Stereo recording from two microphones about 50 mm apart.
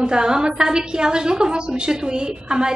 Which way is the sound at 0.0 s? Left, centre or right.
Centre.